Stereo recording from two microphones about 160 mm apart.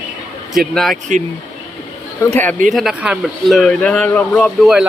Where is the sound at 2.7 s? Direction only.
Centre (ahead or behind).